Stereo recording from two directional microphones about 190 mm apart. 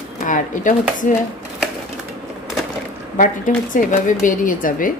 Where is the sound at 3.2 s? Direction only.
45° left (ahead or behind).